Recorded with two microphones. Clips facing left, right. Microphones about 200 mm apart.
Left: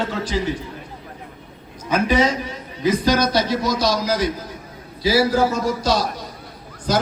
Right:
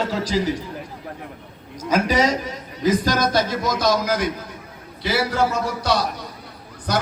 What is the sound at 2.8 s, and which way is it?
A man's voice, 45° right (ahead or behind).